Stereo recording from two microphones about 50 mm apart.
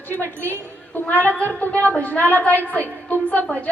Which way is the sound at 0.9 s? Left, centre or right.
Left.